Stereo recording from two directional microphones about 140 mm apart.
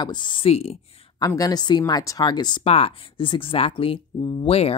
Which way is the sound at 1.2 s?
25° left (ahead or behind).